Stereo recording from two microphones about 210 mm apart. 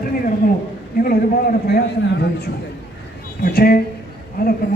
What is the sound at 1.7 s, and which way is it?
A man's voice, 50° left (ahead or behind).